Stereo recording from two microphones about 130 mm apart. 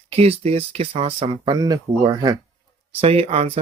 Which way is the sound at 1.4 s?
30° right (ahead or behind).